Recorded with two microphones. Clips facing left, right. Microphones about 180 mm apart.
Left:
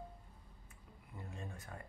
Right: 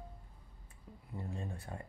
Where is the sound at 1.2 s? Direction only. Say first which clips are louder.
Right 6 dB; 30° right (ahead or behind).